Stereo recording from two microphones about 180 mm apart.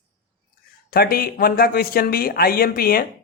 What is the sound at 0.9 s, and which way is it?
Speech, 55° left (ahead or behind).